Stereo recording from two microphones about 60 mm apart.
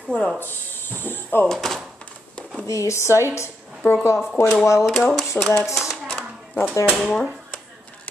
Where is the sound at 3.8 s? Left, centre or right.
Left.